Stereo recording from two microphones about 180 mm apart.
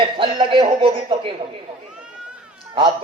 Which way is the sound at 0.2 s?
30° right (ahead or behind).